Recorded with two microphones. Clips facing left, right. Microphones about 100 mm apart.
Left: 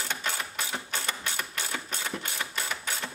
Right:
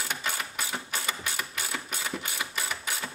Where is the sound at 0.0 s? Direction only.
10° right (ahead or behind).